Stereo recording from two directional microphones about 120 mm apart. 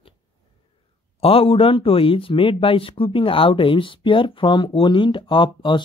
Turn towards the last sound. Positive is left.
turn(degrees=45)  # may be behind; listen again after turning